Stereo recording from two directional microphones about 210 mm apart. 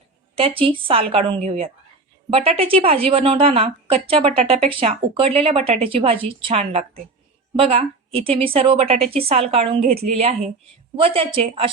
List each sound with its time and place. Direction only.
0.3 s a woman's voice: 25° right (ahead or behind)